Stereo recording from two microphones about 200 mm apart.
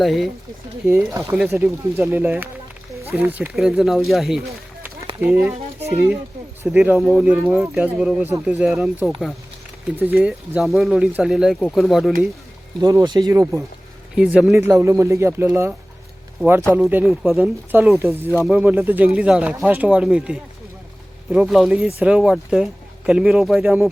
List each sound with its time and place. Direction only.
0.0 s speech: centre (ahead or behind)
0.9 s speech: 10° right (ahead or behind)
12.8 s speech: 15° right (ahead or behind)
14.2 s speech: 5° right (ahead or behind)